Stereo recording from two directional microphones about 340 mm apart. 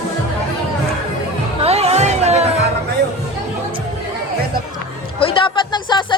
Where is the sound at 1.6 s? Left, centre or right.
Centre.